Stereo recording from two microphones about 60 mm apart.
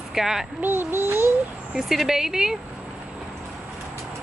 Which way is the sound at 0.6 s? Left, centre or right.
Right.